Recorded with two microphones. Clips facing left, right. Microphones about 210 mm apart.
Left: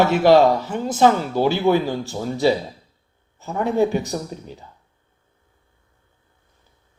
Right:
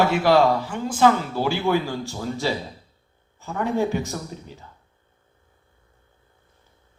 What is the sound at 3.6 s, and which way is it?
Speech, 15° left (ahead or behind).